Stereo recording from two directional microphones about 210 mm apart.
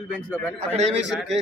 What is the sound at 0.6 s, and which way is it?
Speech, 30° right (ahead or behind).